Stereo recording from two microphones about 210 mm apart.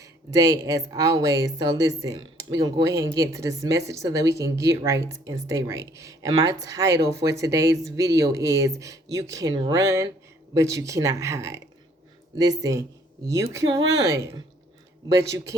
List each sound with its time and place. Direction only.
0.0 s speech: 15° right (ahead or behind)